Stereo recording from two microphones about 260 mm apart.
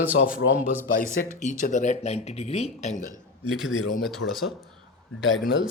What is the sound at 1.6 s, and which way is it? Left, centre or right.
Speech, left.